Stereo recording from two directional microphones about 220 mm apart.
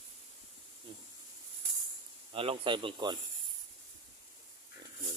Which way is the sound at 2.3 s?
25° right (ahead or behind).